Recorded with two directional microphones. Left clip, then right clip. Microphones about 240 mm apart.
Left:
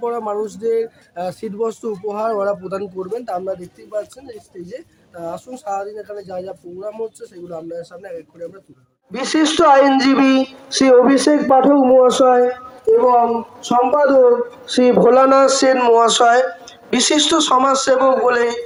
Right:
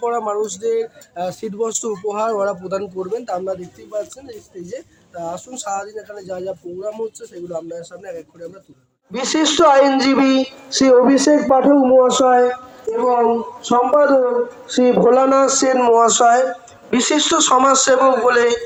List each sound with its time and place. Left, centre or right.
0.0 s speech: centre
9.1 s a woman's voice: centre; by 12.4 s left
13.6 s speech: left
14.9 s a woman's voice: left; by 18.6 s centre